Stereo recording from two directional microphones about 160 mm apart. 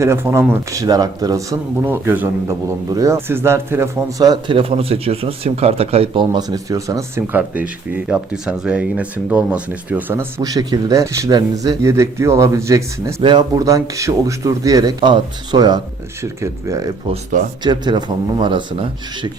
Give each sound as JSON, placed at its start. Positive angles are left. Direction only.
{"t": 0.0, "sound": "speech", "side_deg": -15}